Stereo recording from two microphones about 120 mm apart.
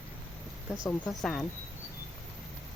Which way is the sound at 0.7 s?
5° right (ahead or behind).